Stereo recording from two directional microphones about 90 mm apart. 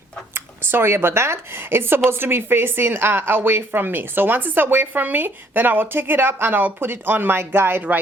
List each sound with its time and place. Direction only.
0.3 s a woman's voice: 25° right (ahead or behind)